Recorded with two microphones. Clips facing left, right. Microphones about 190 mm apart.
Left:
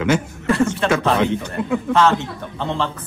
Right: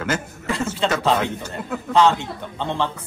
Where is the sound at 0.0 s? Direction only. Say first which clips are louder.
Left 7 dB; 5° right (ahead or behind).